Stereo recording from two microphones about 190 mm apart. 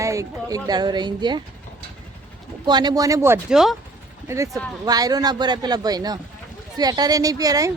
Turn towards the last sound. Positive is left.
turn(degrees=-20)  # may be behind; listen again after turning